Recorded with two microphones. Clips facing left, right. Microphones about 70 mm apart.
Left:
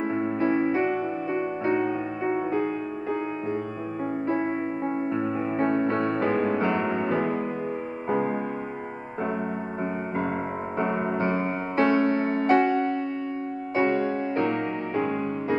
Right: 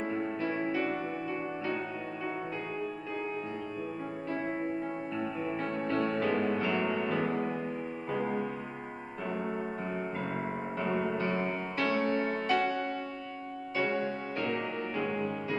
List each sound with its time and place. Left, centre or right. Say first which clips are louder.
0.0 s music: left 8 dB; left
4.3 s music: left 5 dB; left
10.8 s music: left 6 dB; left